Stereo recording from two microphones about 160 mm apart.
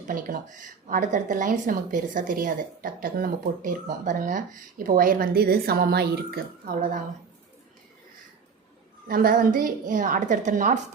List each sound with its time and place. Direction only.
0.1 s speech: 55° right (ahead or behind)
9.0 s speech: 65° right (ahead or behind)